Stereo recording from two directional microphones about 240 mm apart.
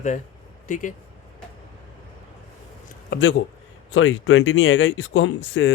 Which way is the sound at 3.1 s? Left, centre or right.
Left.